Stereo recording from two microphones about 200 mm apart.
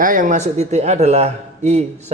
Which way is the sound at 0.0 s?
40° right (ahead or behind).